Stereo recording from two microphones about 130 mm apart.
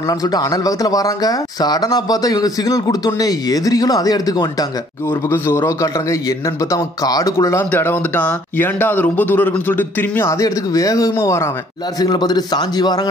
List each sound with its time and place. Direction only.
0.0 s speech: 30° left (ahead or behind)
5.3 s a man's voice: 20° left (ahead or behind)
12.0 s speech: 30° left (ahead or behind)